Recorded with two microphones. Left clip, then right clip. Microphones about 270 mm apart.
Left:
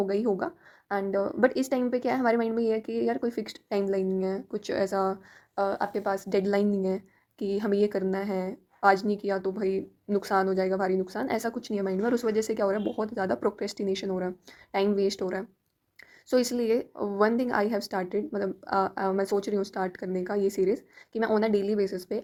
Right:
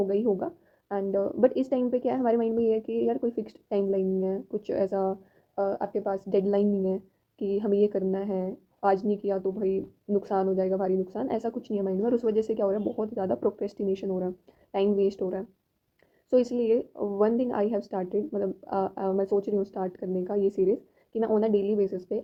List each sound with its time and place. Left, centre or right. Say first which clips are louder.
0.0 s a woman's voice: right 1 dB; left